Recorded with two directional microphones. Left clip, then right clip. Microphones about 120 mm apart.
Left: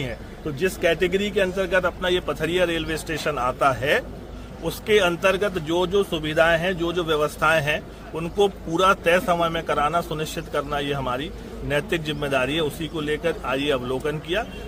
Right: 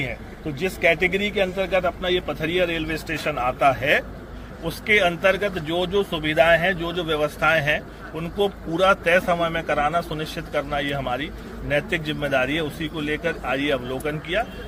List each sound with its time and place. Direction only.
0.0 s speech: 35° left (ahead or behind)